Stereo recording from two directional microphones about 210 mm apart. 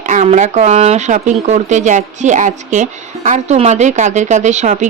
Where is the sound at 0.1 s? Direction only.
35° right (ahead or behind).